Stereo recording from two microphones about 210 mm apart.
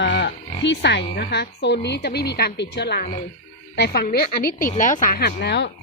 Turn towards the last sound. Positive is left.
turn(degrees=50)  # may be behind; listen again after turning